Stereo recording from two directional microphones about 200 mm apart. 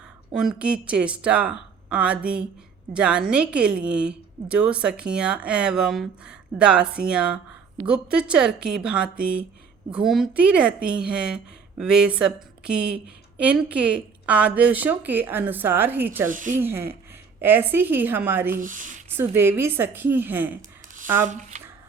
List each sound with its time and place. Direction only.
0.3 s a woman's voice: 5° right (ahead or behind)
16.3 s speech: 40° right (ahead or behind)
16.6 s speech: 10° right (ahead or behind)
18.6 s speech: 40° right (ahead or behind)
19.1 s speech: 10° right (ahead or behind)
20.6 s a sound: 40° right (ahead or behind)
21.2 s speech: 35° right (ahead or behind)